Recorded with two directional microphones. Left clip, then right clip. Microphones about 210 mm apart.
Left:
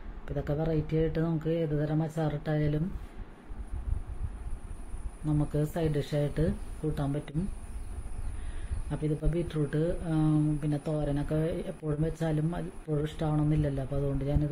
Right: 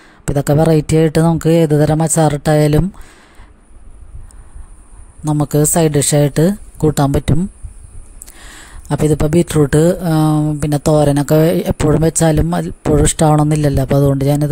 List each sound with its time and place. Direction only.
0.2 s speech: 50° right (ahead or behind)
5.2 s speech: 50° right (ahead or behind)
8.8 s speech: 50° right (ahead or behind)